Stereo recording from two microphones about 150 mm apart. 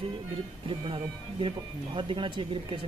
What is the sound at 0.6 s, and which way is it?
Speech, 35° right (ahead or behind).